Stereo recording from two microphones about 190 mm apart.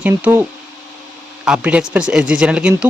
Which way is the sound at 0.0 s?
10° right (ahead or behind).